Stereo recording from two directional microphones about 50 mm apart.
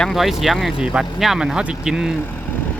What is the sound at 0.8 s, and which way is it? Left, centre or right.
Speech, centre.